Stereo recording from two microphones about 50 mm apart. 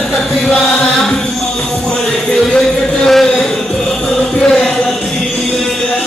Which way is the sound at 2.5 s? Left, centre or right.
Centre.